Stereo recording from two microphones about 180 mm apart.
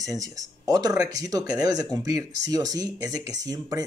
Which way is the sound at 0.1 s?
20° right (ahead or behind).